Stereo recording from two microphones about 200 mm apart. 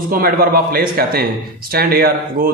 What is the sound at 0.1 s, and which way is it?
Speech, 45° right (ahead or behind).